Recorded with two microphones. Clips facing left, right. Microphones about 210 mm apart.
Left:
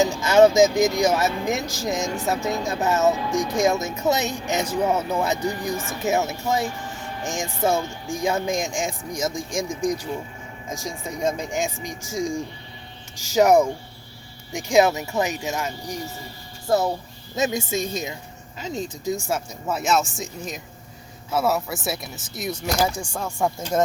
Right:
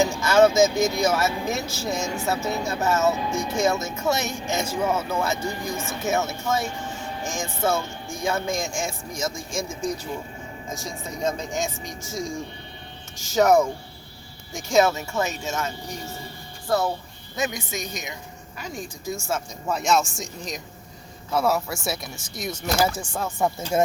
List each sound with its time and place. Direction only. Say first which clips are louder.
0.2 s speech: left 3 dB; 20° left (ahead or behind)
13.3 s speech: left 2 dB; 15° left (ahead or behind)
19.6 s speech: even; 5° left (ahead or behind)